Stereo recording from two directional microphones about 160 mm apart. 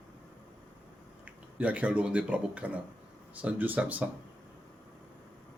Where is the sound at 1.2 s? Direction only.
10° right (ahead or behind).